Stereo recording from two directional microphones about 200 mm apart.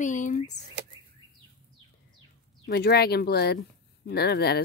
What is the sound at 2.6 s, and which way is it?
Speech, 55° left (ahead or behind).